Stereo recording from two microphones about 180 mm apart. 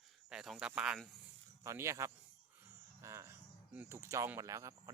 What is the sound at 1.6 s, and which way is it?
Speech, 15° right (ahead or behind).